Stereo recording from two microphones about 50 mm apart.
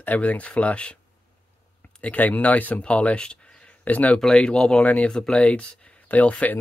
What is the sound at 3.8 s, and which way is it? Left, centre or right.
Speech, left.